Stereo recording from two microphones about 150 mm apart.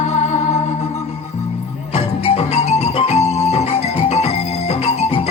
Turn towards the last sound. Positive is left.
turn(degrees=45)  # may be behind; listen again after turning